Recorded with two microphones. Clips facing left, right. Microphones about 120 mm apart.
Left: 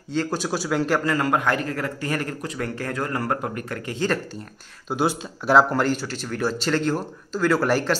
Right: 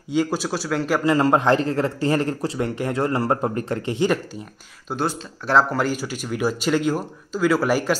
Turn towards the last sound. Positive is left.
turn(degrees=-5)  # may be behind; listen again after turning